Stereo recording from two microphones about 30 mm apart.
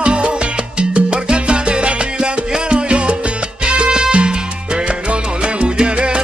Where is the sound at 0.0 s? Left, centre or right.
Right.